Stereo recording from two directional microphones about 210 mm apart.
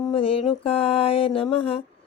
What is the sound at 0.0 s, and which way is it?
Mantra, 25° left (ahead or behind).